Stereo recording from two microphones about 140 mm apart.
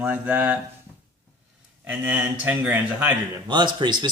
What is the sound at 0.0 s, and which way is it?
Speech, 10° right (ahead or behind).